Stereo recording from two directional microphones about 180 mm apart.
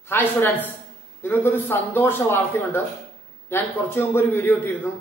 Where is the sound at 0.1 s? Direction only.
10° left (ahead or behind).